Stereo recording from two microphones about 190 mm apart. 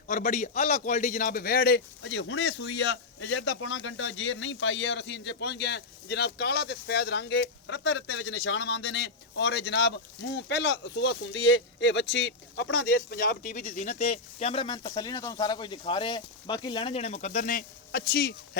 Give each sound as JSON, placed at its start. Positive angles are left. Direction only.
{"t": 0.1, "sound": "speech", "side_deg": 40}
{"t": 2.0, "sound": "speech", "side_deg": 70}